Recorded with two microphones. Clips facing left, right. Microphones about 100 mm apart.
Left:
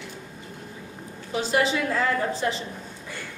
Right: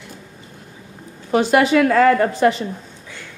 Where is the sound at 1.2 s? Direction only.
70° right (ahead or behind).